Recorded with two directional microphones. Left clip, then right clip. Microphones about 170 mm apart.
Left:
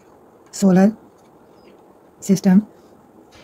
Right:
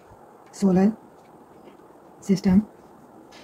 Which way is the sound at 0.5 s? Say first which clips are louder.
Left 6 dB; 65° left (ahead or behind).